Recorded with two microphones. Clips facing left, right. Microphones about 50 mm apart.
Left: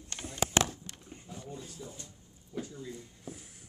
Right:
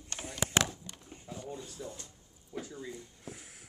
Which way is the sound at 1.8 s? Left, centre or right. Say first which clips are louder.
Right 3 dB; right.